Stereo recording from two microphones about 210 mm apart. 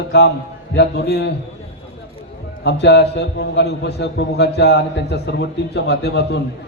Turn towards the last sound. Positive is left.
turn(degrees=50)  # may be behind; listen again after turning